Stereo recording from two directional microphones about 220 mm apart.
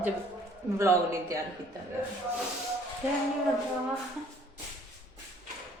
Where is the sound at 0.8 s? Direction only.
15° right (ahead or behind).